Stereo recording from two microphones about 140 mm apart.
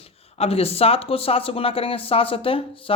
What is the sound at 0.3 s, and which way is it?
Speech, 45° left (ahead or behind).